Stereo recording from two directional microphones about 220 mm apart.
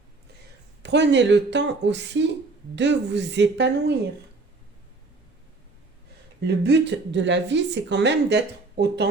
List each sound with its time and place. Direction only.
0.8 s speech: 50° right (ahead or behind)
6.4 s speech: 50° right (ahead or behind)